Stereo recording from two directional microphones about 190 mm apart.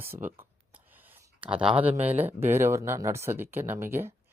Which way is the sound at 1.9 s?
35° right (ahead or behind).